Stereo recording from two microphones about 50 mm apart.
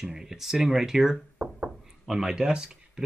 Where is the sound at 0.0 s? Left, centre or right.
Centre.